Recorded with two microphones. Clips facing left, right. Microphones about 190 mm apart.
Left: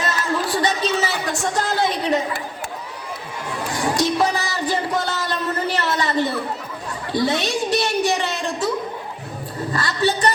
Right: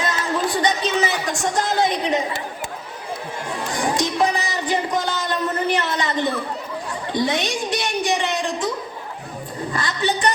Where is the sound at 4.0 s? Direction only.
15° right (ahead or behind).